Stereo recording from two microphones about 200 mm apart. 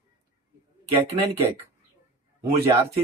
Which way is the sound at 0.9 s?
25° right (ahead or behind).